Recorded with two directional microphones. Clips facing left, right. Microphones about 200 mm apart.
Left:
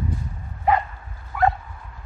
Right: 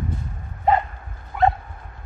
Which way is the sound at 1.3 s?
25° right (ahead or behind).